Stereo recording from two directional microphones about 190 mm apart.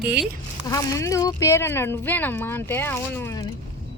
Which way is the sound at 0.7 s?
15° left (ahead or behind).